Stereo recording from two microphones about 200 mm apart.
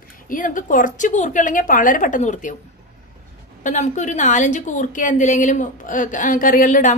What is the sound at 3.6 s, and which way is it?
A woman's voice, 35° left (ahead or behind).